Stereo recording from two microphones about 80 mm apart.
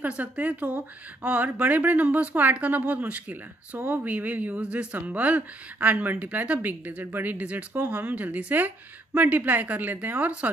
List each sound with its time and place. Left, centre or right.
0.0 s a woman's voice: centre